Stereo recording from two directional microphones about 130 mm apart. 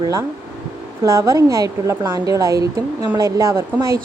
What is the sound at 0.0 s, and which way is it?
A woman's voice, 25° right (ahead or behind).